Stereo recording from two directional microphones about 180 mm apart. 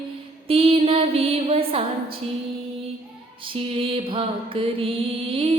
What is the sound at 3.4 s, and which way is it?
Mantra, 30° right (ahead or behind).